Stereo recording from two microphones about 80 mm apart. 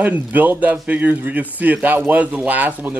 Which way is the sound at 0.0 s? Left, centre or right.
Centre.